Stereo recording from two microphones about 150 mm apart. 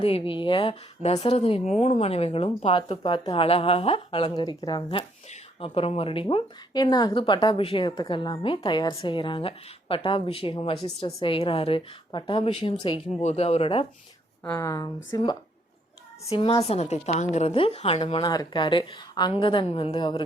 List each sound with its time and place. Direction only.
0.0 s speech: 35° left (ahead or behind)
13.2 s speech: 45° left (ahead or behind)
14.6 s speech: 20° left (ahead or behind)
16.3 s speech: 40° left (ahead or behind)